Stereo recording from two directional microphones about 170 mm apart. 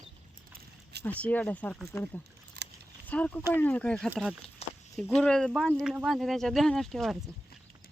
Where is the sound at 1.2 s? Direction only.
10° left (ahead or behind).